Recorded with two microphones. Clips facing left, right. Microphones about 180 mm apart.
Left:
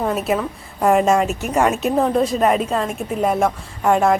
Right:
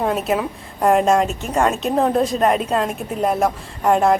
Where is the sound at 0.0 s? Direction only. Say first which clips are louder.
Even; centre (ahead or behind).